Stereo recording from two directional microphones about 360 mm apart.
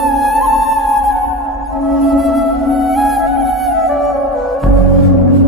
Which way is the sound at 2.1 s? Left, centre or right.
Centre.